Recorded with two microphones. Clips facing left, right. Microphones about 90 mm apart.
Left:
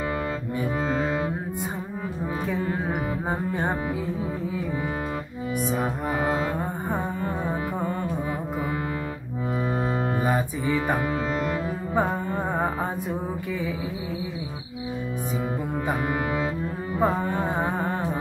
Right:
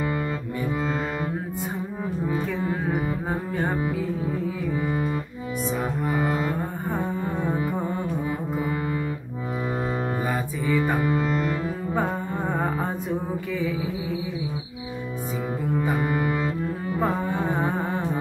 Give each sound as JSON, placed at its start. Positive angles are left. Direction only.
{"t": 2.3, "sound": "music", "side_deg": 15}
{"t": 10.2, "sound": "music", "side_deg": 20}
{"t": 11.0, "sound": "cello", "side_deg": 0}
{"t": 15.7, "sound": "music", "side_deg": 10}
{"t": 17.0, "sound": "carnatic music", "side_deg": 15}